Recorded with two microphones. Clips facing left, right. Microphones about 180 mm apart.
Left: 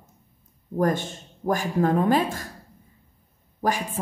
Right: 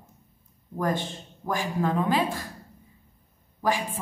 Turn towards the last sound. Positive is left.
turn(degrees=45)  # may be behind; listen again after turning